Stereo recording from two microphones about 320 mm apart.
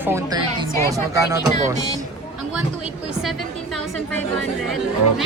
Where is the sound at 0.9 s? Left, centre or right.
Centre.